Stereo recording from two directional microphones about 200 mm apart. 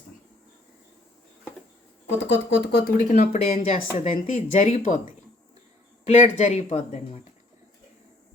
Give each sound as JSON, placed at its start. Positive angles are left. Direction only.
{"t": 2.1, "sound": "speech", "side_deg": 60}
{"t": 3.1, "sound": "speech", "side_deg": 35}
{"t": 6.1, "sound": "speech", "side_deg": 40}